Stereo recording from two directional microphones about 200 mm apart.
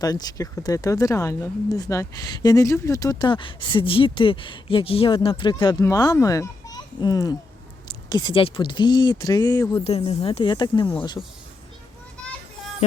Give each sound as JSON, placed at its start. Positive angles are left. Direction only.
{"t": 0.0, "sound": "speech", "side_deg": 20}